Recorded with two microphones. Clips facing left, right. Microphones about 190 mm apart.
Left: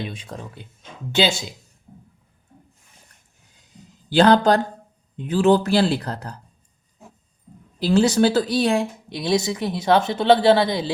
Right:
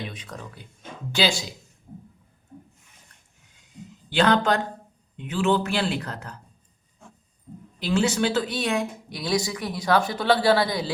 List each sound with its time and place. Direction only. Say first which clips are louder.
0.1 s speech: left 4 dB; 30° left (ahead or behind)
4.1 s speech: left 6 dB; 35° left (ahead or behind)
7.8 s speech: left 6 dB; 35° left (ahead or behind)